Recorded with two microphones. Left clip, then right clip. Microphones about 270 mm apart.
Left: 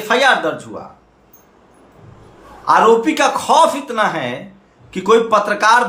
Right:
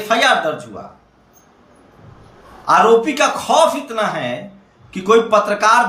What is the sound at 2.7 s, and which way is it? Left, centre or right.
Speech, centre.